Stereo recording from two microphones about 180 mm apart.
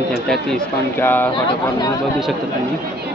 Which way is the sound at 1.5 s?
20° left (ahead or behind).